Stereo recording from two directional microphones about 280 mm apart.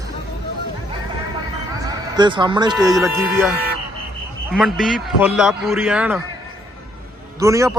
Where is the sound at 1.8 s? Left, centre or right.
Centre.